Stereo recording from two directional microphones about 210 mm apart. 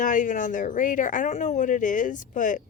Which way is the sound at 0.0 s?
40° left (ahead or behind).